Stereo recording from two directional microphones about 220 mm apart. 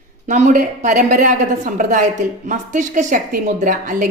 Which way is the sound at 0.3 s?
35° right (ahead or behind).